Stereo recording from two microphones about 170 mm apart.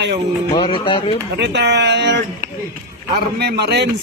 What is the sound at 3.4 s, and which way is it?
Speech, 75° right (ahead or behind).